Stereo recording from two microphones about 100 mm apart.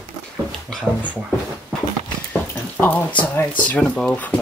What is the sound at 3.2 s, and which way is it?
Speech, 15° left (ahead or behind).